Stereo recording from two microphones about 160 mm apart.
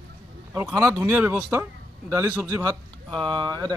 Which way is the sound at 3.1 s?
30° right (ahead or behind).